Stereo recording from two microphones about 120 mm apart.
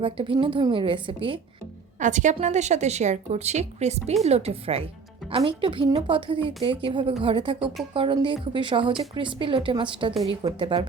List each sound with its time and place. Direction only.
0.0 s a woman's voice: 50° right (ahead or behind)
2.0 s a woman's voice: 90° right; by 10.2 s 45° right (ahead or behind)
10.4 s a woman's voice: 35° right (ahead or behind)